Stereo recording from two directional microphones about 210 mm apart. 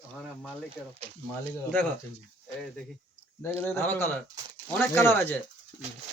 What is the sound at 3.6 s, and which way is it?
Speech, 10° left (ahead or behind).